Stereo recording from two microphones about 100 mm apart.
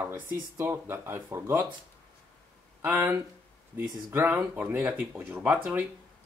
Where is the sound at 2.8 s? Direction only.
15° right (ahead or behind).